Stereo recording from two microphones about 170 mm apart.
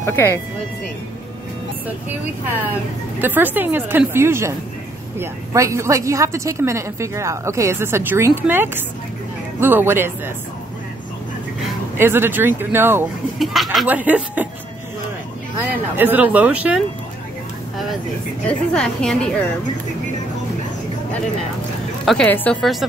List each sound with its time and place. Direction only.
0.0 s speech: 15° left (ahead or behind)
2.7 s a woman's voice: 10° right (ahead or behind)
12.0 s a woman's voice: 15° right (ahead or behind)
13.4 s a woman's voice: centre (ahead or behind)
16.0 s a woman's voice: 10° right (ahead or behind)
18.5 s a woman's voice: 5° left (ahead or behind)
22.0 s a woman's voice: 5° left (ahead or behind)